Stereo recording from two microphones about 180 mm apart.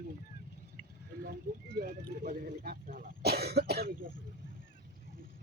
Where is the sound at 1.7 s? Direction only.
60° right (ahead or behind).